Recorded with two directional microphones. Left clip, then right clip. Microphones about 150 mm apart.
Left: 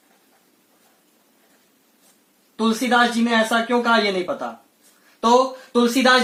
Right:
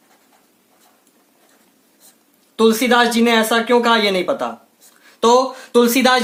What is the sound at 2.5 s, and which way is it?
Speech, 35° right (ahead or behind).